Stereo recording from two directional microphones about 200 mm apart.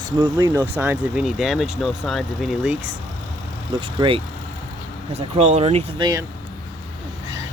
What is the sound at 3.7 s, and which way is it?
Speech, 25° right (ahead or behind).